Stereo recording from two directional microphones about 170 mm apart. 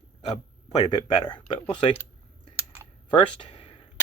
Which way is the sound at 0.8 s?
25° left (ahead or behind).